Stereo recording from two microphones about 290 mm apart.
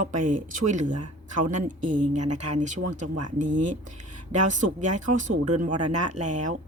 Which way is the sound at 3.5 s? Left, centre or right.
Right.